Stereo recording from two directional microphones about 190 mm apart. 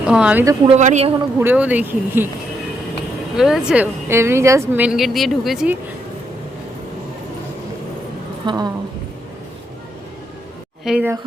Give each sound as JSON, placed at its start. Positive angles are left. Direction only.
{"t": 0.1, "sound": "a woman's voice", "side_deg": -5}
{"t": 0.4, "sound": "speech", "side_deg": -25}
{"t": 0.8, "sound": "a woman's voice", "side_deg": -35}
{"t": 1.4, "sound": "speech", "side_deg": -10}
{"t": 3.3, "sound": "a woman's voice", "side_deg": 0}
{"t": 8.4, "sound": "speech", "side_deg": -20}
{"t": 10.8, "sound": "speech", "side_deg": -10}